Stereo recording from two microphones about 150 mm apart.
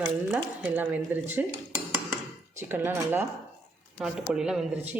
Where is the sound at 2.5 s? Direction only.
15° right (ahead or behind).